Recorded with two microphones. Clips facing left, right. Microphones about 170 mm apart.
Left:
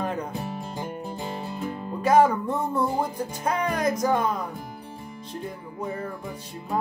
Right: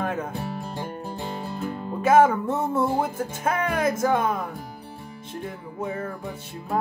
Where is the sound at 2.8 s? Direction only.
5° right (ahead or behind).